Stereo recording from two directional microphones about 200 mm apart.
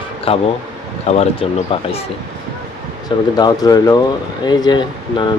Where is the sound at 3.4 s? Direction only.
20° left (ahead or behind).